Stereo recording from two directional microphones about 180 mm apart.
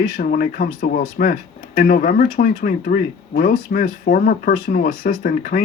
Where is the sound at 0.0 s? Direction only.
50° left (ahead or behind).